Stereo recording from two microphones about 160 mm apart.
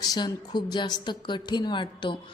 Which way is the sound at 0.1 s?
25° left (ahead or behind).